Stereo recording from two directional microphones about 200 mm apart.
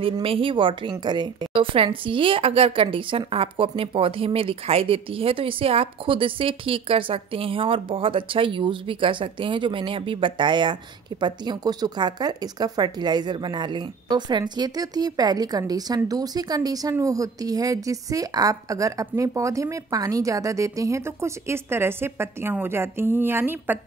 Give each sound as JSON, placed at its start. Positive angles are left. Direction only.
{"t": 0.0, "sound": "a woman's voice", "side_deg": -25}